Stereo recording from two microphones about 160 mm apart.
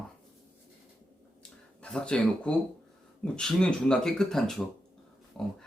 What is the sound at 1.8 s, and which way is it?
Speech, 5° left (ahead or behind).